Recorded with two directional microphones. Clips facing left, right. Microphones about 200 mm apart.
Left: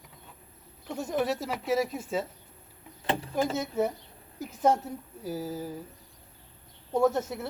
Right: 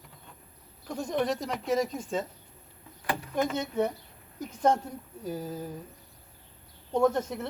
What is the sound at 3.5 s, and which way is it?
Speech, 5° left (ahead or behind).